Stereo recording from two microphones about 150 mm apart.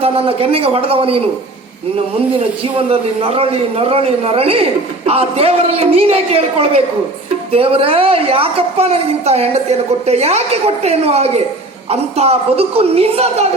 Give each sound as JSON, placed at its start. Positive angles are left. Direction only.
{"t": 0.0, "sound": "a man's voice", "side_deg": -40}
{"t": 2.7, "sound": "a man's voice", "side_deg": -40}